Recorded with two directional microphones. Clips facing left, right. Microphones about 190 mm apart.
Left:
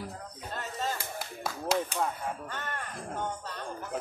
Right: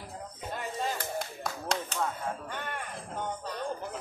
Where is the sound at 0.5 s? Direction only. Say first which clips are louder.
Right 1 dB; 15° right (ahead or behind).